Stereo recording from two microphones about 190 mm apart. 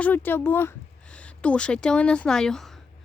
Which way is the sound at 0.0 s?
10° left (ahead or behind).